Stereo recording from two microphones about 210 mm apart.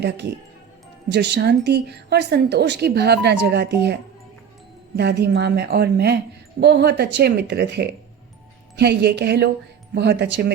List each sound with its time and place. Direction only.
1.1 s a woman's voice: 55° right (ahead or behind)
4.9 s a woman's voice: 50° right (ahead or behind)